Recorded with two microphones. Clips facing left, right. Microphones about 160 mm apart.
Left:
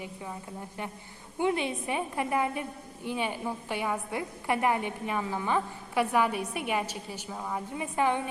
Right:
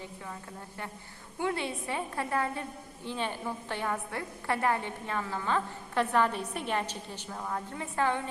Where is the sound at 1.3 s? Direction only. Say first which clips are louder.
Left 4 dB; 20° left (ahead or behind).